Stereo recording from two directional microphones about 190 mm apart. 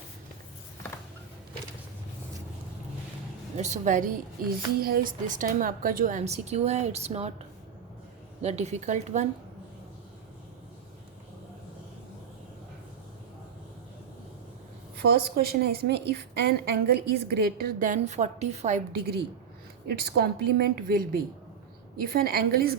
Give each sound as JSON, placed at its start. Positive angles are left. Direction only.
{"t": 3.6, "sound": "a woman's voice", "side_deg": -40}
{"t": 8.4, "sound": "a woman's voice", "side_deg": -35}
{"t": 14.9, "sound": "a woman's voice", "side_deg": -55}
{"t": 18.9, "sound": "a woman's voice", "side_deg": -55}